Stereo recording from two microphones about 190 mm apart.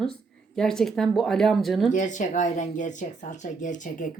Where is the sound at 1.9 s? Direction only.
40° left (ahead or behind).